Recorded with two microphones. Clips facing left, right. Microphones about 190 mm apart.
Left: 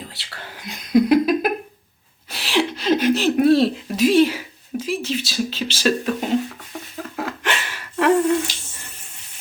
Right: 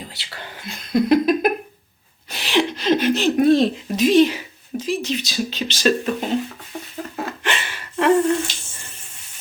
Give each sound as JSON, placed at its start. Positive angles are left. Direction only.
{"t": 0.1, "sound": "speech", "side_deg": 0}
{"t": 0.7, "sound": "laughter", "side_deg": 10}
{"t": 2.3, "sound": "speech", "side_deg": 5}
{"t": 7.2, "sound": "gasp", "side_deg": 5}